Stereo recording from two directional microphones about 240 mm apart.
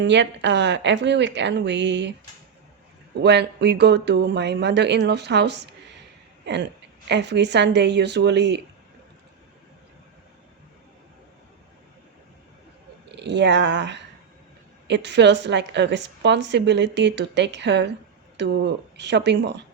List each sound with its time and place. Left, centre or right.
0.0 s speech: right
3.2 s speech: right
13.1 s speech: right